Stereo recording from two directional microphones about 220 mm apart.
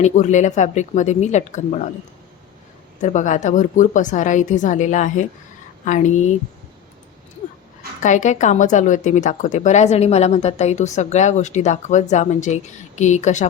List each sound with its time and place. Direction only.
0.0 s a woman's voice: 35° left (ahead or behind)
3.0 s a woman's voice: 35° left (ahead or behind)
8.0 s a woman's voice: 35° left (ahead or behind)